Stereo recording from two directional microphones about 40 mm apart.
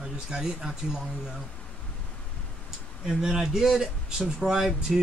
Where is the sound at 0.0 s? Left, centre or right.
Centre.